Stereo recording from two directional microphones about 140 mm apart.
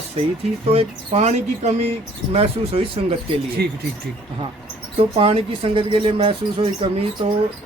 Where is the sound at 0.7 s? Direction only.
45° right (ahead or behind).